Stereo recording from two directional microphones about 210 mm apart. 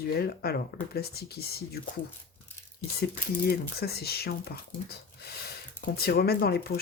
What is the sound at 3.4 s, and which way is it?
Speech, 50° left (ahead or behind).